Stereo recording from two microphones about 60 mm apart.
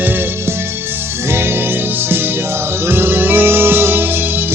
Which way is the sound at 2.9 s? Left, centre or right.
Right.